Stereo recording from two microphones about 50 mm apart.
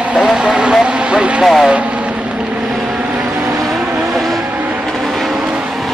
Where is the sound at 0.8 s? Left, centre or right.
Centre.